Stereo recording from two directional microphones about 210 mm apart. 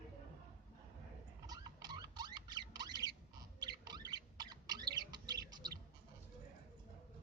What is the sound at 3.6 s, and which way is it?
Rodents, 20° right (ahead or behind).